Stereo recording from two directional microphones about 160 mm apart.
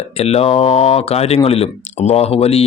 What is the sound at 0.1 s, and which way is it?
Speech, 40° left (ahead or behind).